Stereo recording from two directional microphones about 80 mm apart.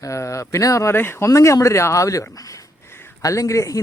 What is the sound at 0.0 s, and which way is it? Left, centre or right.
Speech, left.